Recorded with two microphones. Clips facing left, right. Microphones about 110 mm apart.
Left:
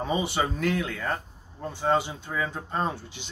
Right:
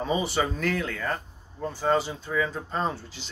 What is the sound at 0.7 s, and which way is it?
Speech, 20° left (ahead or behind).